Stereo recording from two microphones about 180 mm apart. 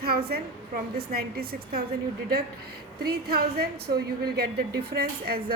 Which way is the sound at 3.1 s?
60° right (ahead or behind).